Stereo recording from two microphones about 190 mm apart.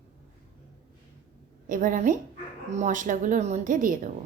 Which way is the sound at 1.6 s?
45° right (ahead or behind).